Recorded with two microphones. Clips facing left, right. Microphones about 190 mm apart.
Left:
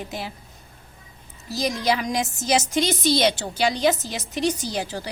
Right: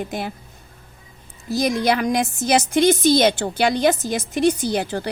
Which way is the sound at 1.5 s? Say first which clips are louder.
Right 4 dB; 55° right (ahead or behind).